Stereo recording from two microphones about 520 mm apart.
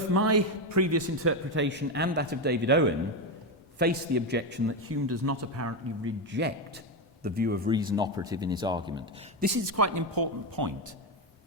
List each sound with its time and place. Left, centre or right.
0.1 s a man's voice: right; by 9.5 s centre
9.6 s speech: right